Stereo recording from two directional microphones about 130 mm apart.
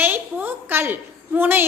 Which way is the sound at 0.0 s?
15° right (ahead or behind).